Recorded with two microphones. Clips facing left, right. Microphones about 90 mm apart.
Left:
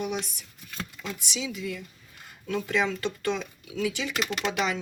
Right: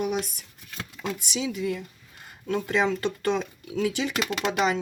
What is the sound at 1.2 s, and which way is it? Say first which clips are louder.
Speech: right 4 dB; 40° right (ahead or behind).